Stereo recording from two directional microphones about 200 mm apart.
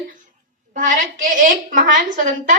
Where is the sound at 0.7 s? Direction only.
40° right (ahead or behind).